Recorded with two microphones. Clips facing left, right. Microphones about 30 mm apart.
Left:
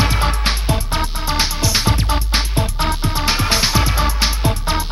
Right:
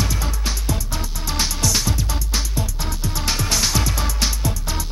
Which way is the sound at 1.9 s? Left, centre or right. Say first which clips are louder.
Left 6 dB; left.